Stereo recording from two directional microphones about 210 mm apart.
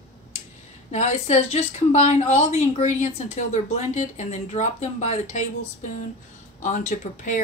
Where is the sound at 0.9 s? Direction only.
30° left (ahead or behind).